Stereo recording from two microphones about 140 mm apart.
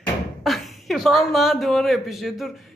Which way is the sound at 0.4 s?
Centre (ahead or behind).